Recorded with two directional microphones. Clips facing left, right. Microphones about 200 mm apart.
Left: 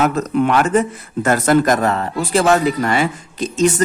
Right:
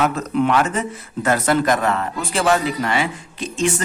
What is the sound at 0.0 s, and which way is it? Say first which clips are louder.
Speech: left 3 dB; 45° left (ahead or behind).